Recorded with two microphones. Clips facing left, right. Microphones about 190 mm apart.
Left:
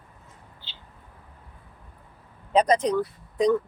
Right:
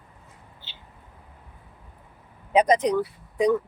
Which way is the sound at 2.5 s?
15° right (ahead or behind).